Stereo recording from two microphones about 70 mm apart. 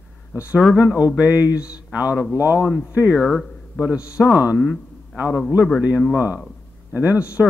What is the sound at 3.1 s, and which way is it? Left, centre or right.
Speech, centre.